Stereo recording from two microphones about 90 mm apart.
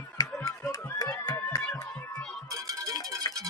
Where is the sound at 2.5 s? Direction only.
40° right (ahead or behind).